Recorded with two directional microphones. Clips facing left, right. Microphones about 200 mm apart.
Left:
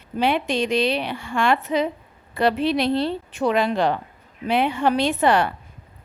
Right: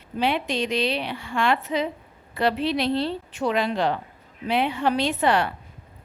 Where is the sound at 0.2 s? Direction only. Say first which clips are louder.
Left 3 dB; 50° left (ahead or behind).